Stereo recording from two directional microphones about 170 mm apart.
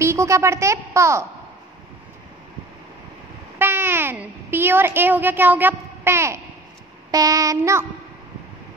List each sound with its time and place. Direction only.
0.0 s a woman's voice: 15° right (ahead or behind)
3.5 s a woman's voice: 15° right (ahead or behind)
7.1 s child singing: 20° right (ahead or behind)